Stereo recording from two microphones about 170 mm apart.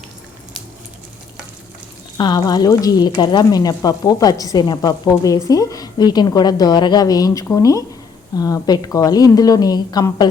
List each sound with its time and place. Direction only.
2.1 s speech: 25° left (ahead or behind)